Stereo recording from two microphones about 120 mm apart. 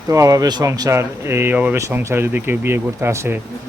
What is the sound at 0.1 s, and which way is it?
A man's voice, 25° right (ahead or behind).